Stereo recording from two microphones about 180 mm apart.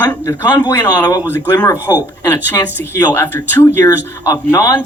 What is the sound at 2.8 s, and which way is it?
Speech, 10° left (ahead or behind).